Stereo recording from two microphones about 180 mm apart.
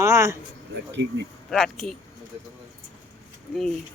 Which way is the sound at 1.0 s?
75° right (ahead or behind).